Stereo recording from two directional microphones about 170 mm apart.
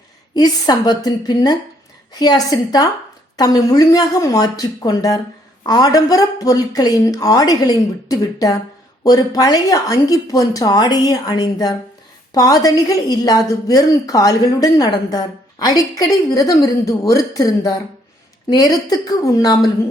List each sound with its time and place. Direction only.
0.3 s speech: 25° left (ahead or behind)